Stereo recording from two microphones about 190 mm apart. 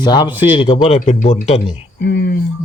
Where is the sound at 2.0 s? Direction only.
60° left (ahead or behind).